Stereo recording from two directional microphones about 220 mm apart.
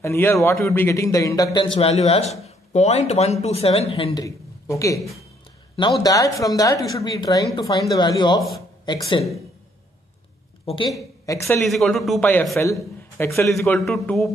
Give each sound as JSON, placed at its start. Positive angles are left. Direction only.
{"t": 0.0, "sound": "a man's voice", "side_deg": 10}
{"t": 11.2, "sound": "a man's voice", "side_deg": 10}
{"t": 11.6, "sound": "a man's voice", "side_deg": 0}
{"t": 13.6, "sound": "a man's voice", "side_deg": 0}